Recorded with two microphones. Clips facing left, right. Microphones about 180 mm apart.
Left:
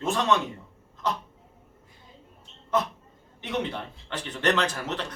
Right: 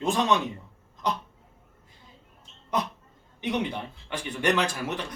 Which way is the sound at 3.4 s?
15° right (ahead or behind).